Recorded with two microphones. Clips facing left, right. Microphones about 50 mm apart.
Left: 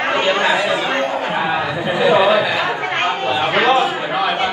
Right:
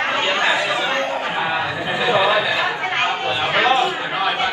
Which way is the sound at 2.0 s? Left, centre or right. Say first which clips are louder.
Left 4 dB; left.